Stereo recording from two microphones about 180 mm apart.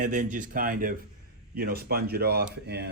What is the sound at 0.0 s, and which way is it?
Speech, 45° right (ahead or behind).